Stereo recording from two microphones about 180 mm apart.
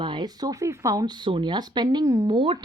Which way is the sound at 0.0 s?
25° right (ahead or behind).